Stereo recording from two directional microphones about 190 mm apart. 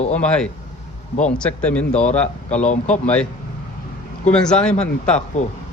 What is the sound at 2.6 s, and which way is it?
Speech, 40° left (ahead or behind).